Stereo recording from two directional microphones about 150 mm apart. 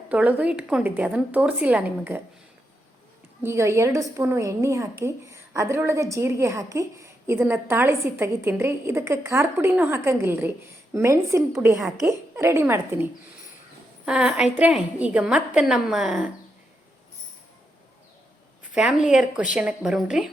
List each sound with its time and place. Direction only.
0.1 s a woman's voice: 10° right (ahead or behind)
3.4 s a woman's voice: 20° right (ahead or behind)
11.8 s a woman's voice: 5° right (ahead or behind)
12.4 s a woman's voice: 15° right (ahead or behind); by 16.3 s centre (ahead or behind)
18.7 s speech: 5° right (ahead or behind)